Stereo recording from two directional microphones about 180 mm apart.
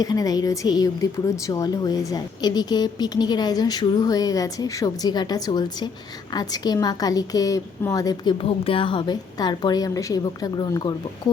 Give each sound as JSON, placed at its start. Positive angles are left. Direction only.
{"t": 0.0, "sound": "a woman's voice", "side_deg": 20}